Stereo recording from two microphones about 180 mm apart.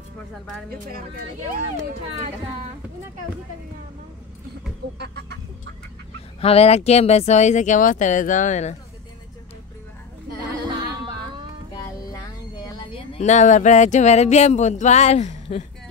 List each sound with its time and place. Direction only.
4.9 s chicken: 65° right (ahead or behind)
6.4 s speech: 35° left (ahead or behind)
11.7 s a sound: 20° left (ahead or behind); by 15.6 s 35° left (ahead or behind)